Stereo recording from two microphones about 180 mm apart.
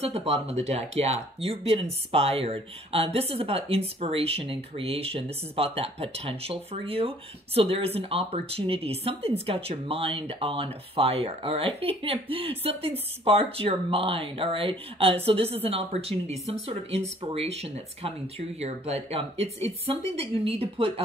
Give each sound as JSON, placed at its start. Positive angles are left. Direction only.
{"t": 0.0, "sound": "speech", "side_deg": -35}